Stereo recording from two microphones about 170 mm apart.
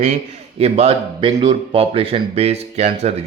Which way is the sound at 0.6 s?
35° right (ahead or behind).